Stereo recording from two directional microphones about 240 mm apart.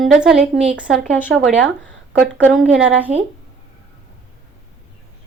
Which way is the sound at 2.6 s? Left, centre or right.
Centre.